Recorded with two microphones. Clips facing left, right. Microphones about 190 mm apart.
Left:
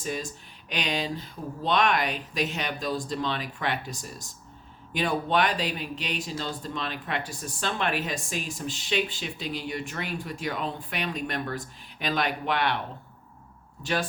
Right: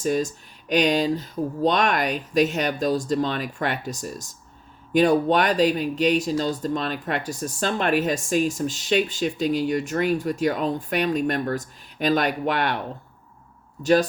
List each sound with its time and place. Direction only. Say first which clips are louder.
0.0 s speech: right 10 dB; 45° right (ahead or behind)
13.8 s speech: right 10 dB; 40° right (ahead or behind)